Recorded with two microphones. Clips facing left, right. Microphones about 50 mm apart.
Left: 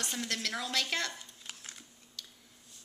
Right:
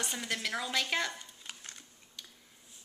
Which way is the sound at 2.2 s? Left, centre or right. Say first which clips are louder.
Left 1 dB; centre.